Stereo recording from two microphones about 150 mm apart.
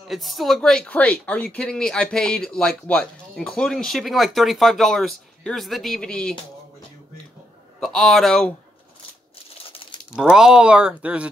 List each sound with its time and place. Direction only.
0.1 s speech: centre (ahead or behind)
7.8 s speech: centre (ahead or behind)
9.7 s a sound: 35° left (ahead or behind)
10.1 s speech: 5° right (ahead or behind)